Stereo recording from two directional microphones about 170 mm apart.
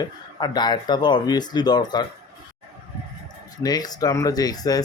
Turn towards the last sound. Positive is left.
turn(degrees=20)  # may be behind; listen again after turning